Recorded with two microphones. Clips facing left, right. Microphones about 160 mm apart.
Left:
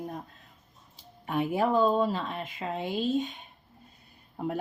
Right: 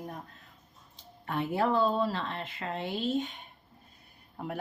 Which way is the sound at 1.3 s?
15° left (ahead or behind).